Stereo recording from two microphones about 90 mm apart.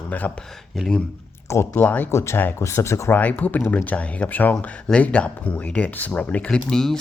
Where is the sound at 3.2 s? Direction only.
15° left (ahead or behind).